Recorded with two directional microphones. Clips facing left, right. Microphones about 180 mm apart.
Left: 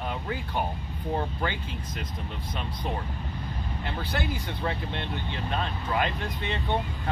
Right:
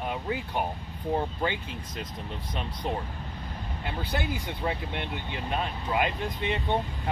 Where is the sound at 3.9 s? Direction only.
20° right (ahead or behind).